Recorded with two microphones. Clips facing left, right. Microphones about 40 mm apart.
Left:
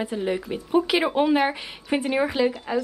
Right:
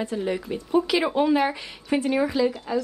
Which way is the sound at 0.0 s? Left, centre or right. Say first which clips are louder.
Left 1 dB; centre.